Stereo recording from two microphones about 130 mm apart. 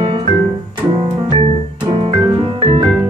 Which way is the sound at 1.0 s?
40° right (ahead or behind).